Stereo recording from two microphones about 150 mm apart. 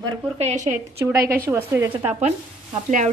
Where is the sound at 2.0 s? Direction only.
45° right (ahead or behind).